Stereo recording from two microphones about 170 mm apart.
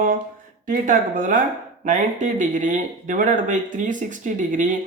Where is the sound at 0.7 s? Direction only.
50° right (ahead or behind).